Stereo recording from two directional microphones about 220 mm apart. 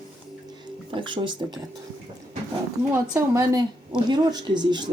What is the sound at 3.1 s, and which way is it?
A child's voice, 15° right (ahead or behind).